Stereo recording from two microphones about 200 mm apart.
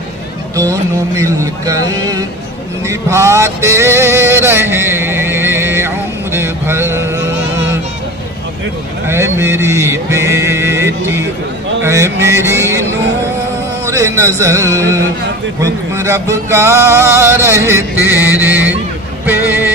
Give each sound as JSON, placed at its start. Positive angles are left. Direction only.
{"t": 0.6, "sound": "music", "side_deg": -15}
{"t": 2.9, "sound": "male singing", "side_deg": -15}
{"t": 9.0, "sound": "music", "side_deg": -10}
{"t": 13.8, "sound": "music", "side_deg": -15}
{"t": 19.2, "sound": "vehicle", "side_deg": -10}